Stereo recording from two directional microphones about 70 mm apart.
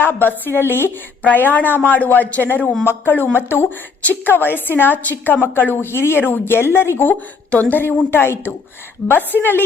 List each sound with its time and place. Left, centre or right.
0.0 s a woman's voice: left
7.5 s a woman's voice: left